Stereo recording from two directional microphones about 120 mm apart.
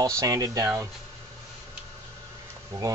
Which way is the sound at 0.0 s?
30° right (ahead or behind).